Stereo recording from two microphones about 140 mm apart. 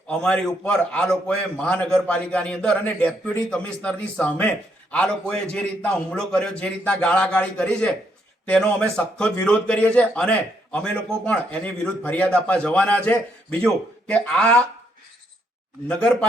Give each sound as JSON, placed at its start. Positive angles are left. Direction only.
{"t": 0.1, "sound": "a man's voice", "side_deg": 5}
{"t": 15.9, "sound": "a man's voice", "side_deg": 10}